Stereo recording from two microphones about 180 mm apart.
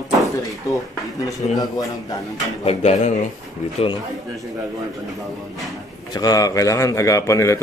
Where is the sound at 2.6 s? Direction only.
35° left (ahead or behind).